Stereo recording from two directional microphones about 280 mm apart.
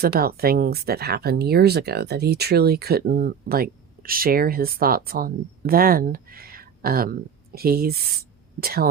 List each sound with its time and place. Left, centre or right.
0.0 s speech: right